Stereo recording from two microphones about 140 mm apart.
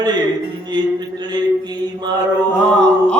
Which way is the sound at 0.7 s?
30° right (ahead or behind).